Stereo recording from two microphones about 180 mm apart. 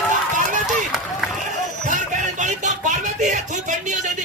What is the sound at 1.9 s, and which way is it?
Music, 45° right (ahead or behind).